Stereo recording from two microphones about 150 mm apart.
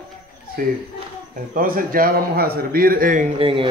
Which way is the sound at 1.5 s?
65° right (ahead or behind).